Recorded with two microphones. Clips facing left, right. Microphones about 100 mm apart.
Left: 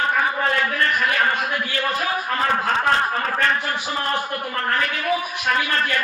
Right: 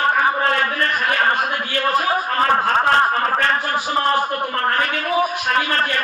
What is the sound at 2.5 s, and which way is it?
A man's voice, 45° right (ahead or behind).